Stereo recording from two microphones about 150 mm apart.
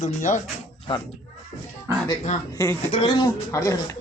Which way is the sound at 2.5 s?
20° left (ahead or behind).